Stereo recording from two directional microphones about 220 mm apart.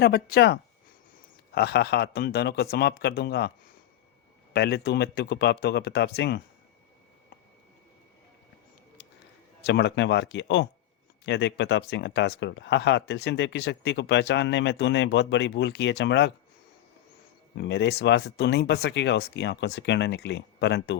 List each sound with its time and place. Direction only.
0.0 s speech: 45° left (ahead or behind)
4.5 s speech: 45° left (ahead or behind)
9.6 s speech: 50° left (ahead or behind)
17.5 s speech: 50° left (ahead or behind)